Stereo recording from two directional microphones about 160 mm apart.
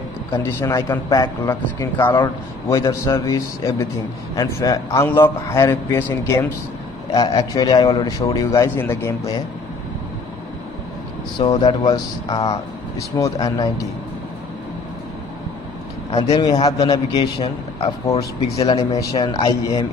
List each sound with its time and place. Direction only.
0.4 s a man's voice: 15° left (ahead or behind)
7.2 s a man's voice: 25° left (ahead or behind)
11.3 s a man's voice: 25° left (ahead or behind)
16.3 s a man's voice: 25° left (ahead or behind)
18.1 s speech: 40° left (ahead or behind)
18.8 s a man's voice: 20° left (ahead or behind)